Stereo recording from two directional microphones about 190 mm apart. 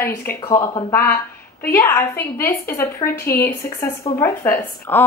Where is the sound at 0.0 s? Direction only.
10° left (ahead or behind).